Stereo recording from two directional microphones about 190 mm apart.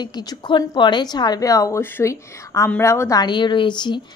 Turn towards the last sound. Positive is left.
turn(degrees=25)  # may be behind; listen again after turning